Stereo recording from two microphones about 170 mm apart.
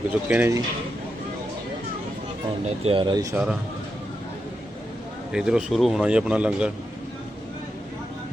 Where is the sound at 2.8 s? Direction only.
30° right (ahead or behind).